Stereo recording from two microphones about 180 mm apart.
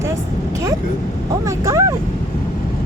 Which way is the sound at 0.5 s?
20° right (ahead or behind).